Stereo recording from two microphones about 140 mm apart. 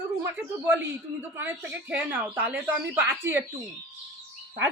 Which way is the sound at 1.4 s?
15° right (ahead or behind).